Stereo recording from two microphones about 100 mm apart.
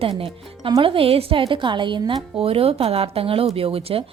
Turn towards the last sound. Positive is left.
turn(degrees=-70)  # may be behind; listen again after turning